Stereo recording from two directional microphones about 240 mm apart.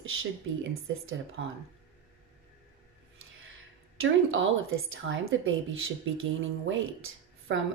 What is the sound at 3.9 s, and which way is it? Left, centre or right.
Speech, right.